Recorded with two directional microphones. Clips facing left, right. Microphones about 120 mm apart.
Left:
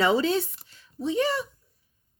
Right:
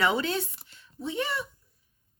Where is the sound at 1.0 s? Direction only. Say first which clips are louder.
Left 6 dB; 40° left (ahead or behind).